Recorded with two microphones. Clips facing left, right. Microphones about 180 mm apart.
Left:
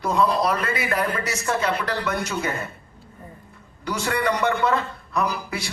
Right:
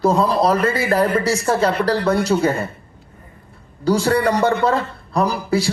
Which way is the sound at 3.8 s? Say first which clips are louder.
Right 8 dB; 30° right (ahead or behind).